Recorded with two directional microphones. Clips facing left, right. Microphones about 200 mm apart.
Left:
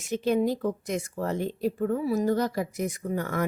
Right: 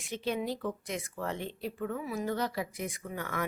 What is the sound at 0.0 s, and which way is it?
Speech, 45° left (ahead or behind).